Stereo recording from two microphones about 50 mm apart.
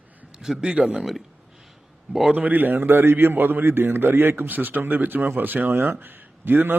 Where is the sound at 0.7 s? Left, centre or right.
Centre.